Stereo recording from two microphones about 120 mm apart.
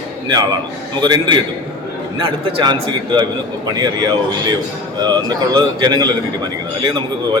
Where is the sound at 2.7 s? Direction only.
40° right (ahead or behind).